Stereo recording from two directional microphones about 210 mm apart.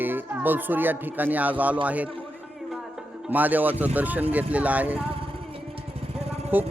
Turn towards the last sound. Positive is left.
turn(degrees=-10)  # may be behind; listen again after turning